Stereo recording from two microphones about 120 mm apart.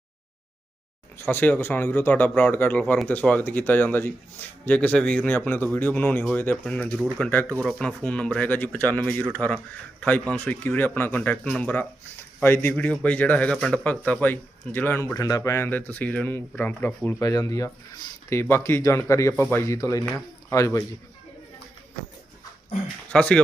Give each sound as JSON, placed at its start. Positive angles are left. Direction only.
{"t": 1.1, "sound": "a man's voice", "side_deg": 20}
{"t": 17.2, "sound": "speech", "side_deg": 30}
{"t": 23.1, "sound": "a man's voice", "side_deg": 10}